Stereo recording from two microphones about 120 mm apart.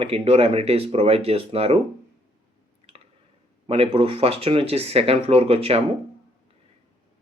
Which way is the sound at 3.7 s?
50° right (ahead or behind).